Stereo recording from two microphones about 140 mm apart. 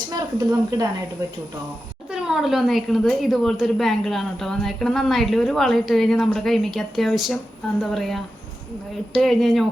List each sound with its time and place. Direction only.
0.1 s speech: 25° right (ahead or behind)
2.0 s speech: 5° right (ahead or behind)